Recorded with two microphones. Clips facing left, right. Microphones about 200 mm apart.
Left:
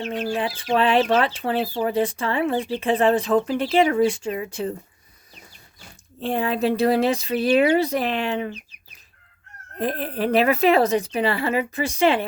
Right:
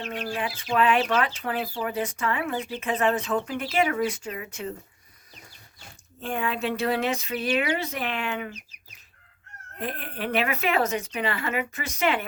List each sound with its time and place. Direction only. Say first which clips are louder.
0.1 s speech: left 5 dB; 25° left (ahead or behind)
6.1 s speech: left 6 dB; 35° left (ahead or behind)
9.7 s speech: left 8 dB; 35° left (ahead or behind)